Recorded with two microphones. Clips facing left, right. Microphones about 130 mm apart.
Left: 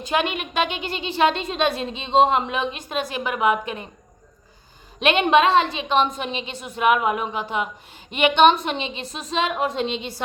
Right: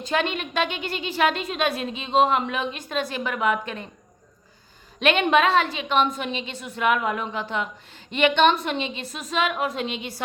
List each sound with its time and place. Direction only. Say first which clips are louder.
0.0 s a woman's voice: left 2 dB; 15° left (ahead or behind)
4.9 s a woman's voice: left 2 dB; 20° left (ahead or behind)